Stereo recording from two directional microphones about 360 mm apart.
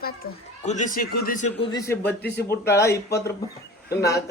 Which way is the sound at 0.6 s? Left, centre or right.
Centre.